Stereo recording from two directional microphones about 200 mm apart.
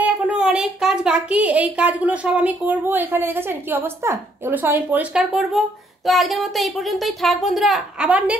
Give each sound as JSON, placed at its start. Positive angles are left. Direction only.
{"t": 0.0, "sound": "a woman's voice", "side_deg": -5}